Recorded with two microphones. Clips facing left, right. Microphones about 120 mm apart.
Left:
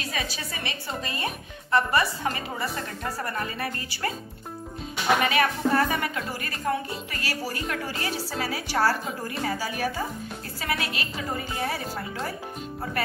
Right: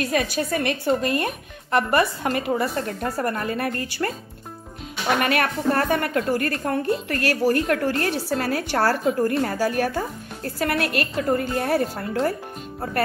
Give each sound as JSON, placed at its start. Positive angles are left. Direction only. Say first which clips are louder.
{"t": 0.0, "sound": "speech", "louder": "right 10 dB", "side_deg": -55}
{"t": 5.2, "sound": "a woman's voice", "louder": "right 2 dB", "side_deg": -55}